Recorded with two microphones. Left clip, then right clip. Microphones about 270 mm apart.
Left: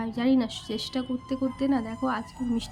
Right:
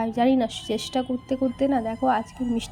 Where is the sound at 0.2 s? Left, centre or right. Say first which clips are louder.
Right 4 dB; centre.